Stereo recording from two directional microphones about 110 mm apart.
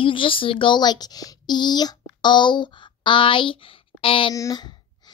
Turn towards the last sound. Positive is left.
turn(degrees=40)  # may be behind; listen again after turning